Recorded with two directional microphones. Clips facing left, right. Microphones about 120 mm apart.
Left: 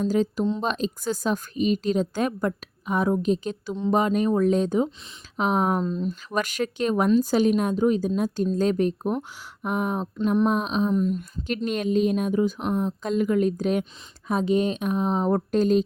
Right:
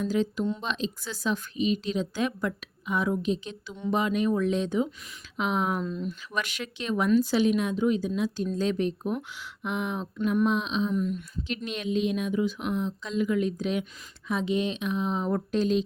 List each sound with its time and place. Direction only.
0.0 s speech: 40° left (ahead or behind)